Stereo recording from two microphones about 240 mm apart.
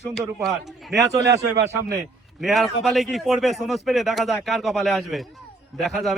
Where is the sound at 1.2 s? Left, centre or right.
Right.